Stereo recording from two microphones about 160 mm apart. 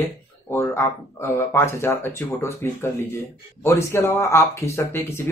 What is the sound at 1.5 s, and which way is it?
A man's voice, 15° left (ahead or behind).